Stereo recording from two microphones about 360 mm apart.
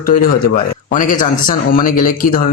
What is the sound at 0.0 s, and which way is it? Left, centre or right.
A man's voice, left.